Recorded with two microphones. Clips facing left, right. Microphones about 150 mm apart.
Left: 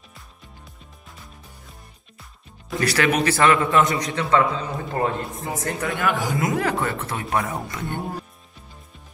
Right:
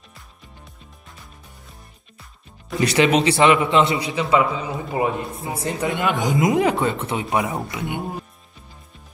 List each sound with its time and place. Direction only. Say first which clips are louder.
2.8 s speech: right 4 dB; 20° right (ahead or behind)
4.0 s a man's voice: right 1 dB; 10° right (ahead or behind)
5.6 s speech: right 3 dB; 20° right (ahead or behind)
8.0 s speech: right 1 dB; 5° right (ahead or behind)